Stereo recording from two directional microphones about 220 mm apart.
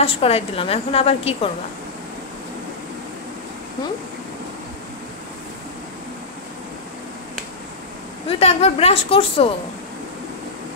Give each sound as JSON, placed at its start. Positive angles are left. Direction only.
{"t": 0.0, "sound": "a woman's voice", "side_deg": 25}
{"t": 8.3, "sound": "a woman's voice", "side_deg": 25}